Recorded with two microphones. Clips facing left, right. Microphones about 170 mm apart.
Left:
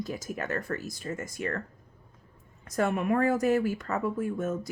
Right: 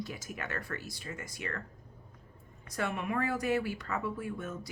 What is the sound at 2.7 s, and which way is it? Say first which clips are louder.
Speech: left 8 dB; 45° left (ahead or behind).